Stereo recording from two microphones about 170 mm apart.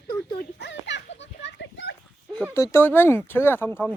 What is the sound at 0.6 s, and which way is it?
Children playing, 90° left.